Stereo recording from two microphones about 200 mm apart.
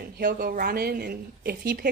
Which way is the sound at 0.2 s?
50° right (ahead or behind).